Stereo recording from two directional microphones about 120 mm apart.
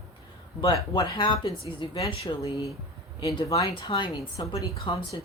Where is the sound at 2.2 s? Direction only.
30° left (ahead or behind).